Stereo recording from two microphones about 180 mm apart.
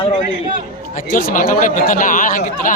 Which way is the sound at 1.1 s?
50° left (ahead or behind).